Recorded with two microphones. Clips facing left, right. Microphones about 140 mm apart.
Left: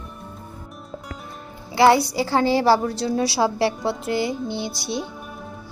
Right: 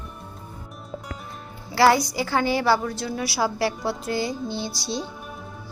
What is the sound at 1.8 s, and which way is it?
A woman's voice, 25° left (ahead or behind).